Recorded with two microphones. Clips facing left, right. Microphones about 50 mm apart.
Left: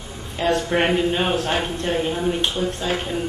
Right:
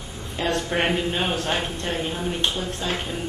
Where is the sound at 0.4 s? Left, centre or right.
Centre.